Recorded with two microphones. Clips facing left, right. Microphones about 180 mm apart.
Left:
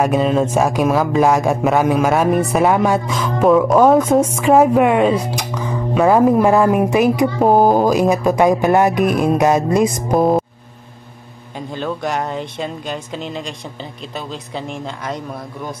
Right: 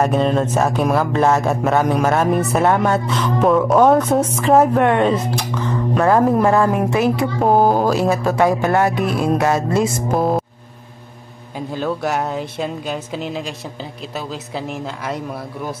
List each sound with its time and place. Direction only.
0.0 s speech: 5° left (ahead or behind)
11.7 s speech: 5° right (ahead or behind)